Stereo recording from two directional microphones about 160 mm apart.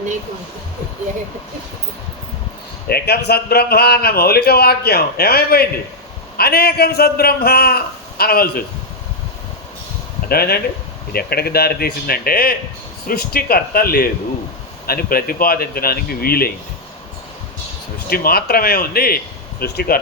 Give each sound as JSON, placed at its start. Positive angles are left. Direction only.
{"t": 2.9, "sound": "a man's voice", "side_deg": 85}
{"t": 10.2, "sound": "a man's voice", "side_deg": 75}
{"t": 18.1, "sound": "a man's voice", "side_deg": 70}